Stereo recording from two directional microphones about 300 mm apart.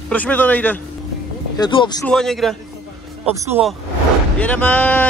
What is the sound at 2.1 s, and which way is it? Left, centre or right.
Speech, centre.